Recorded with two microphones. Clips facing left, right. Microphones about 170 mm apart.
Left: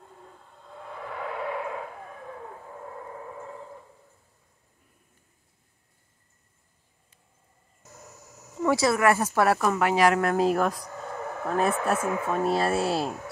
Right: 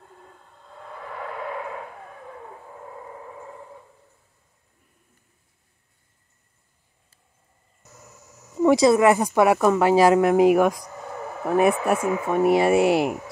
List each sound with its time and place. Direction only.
8.6 s speech: 20° right (ahead or behind)